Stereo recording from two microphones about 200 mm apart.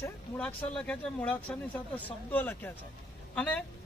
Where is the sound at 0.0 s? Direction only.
10° left (ahead or behind).